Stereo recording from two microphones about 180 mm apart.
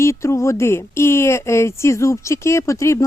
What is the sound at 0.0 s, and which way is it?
Speech, 15° left (ahead or behind).